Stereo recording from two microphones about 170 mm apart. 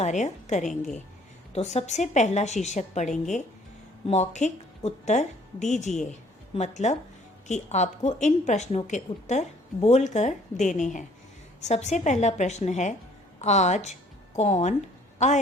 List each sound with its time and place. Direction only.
0.0 s a woman's voice: 45° left (ahead or behind)